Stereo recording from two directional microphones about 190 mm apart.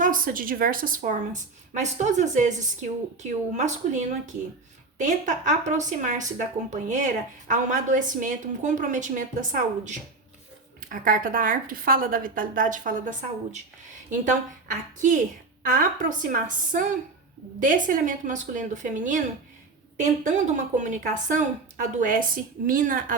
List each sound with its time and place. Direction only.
0.0 s a woman's voice: 45° right (ahead or behind)